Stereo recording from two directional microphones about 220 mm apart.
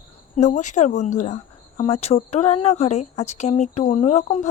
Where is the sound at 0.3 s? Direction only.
35° left (ahead or behind).